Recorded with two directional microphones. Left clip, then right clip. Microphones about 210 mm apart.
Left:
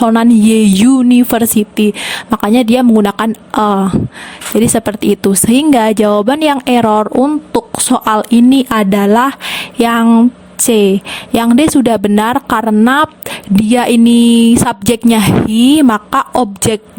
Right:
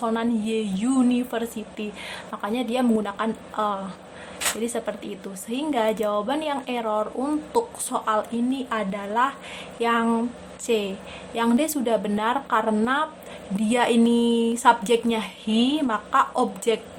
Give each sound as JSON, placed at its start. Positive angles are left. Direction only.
{"t": 0.0, "sound": "a woman's voice", "side_deg": 50}